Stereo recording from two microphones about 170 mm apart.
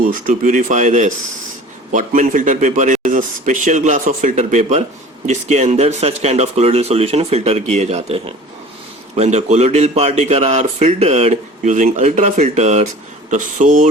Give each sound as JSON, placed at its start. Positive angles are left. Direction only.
{"t": 0.1, "sound": "speech", "side_deg": -50}